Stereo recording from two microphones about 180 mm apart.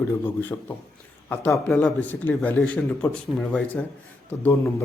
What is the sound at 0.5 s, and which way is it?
Speech, 15° left (ahead or behind).